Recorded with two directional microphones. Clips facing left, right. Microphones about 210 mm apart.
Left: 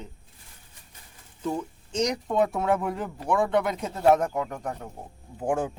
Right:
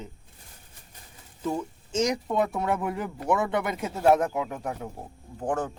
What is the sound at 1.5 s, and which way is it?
Speech, 5° right (ahead or behind).